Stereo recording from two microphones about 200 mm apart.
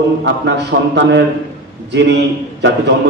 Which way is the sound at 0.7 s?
60° right (ahead or behind).